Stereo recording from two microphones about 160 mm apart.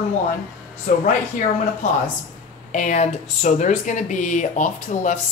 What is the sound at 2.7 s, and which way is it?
Speech, 50° left (ahead or behind).